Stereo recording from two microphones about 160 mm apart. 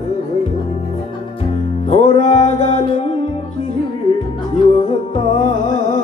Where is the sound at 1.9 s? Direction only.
40° left (ahead or behind).